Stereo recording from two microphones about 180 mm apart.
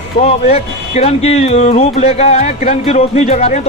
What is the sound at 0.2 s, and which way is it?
Speech, 35° left (ahead or behind).